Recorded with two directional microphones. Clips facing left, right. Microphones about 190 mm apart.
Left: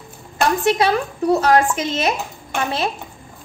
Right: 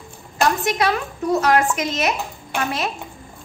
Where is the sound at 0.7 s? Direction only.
30° left (ahead or behind).